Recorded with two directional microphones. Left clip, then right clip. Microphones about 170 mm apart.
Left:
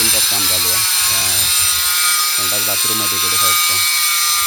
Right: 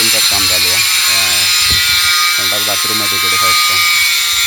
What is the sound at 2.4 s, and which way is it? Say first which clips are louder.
Speech: right 4 dB; centre (ahead or behind).